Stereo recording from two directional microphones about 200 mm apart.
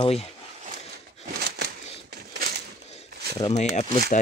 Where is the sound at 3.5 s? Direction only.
35° left (ahead or behind).